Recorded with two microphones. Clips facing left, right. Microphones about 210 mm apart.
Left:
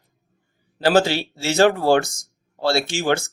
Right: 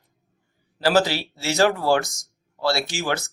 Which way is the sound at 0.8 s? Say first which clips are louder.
Left 3 dB; 30° left (ahead or behind).